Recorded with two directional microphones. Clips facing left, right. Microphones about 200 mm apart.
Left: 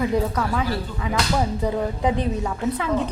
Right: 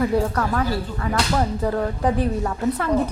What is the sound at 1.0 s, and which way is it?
A woman's voice, 10° left (ahead or behind).